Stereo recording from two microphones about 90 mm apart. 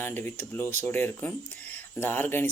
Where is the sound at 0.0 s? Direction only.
25° left (ahead or behind).